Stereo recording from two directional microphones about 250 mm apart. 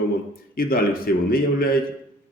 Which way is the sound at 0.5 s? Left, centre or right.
Left.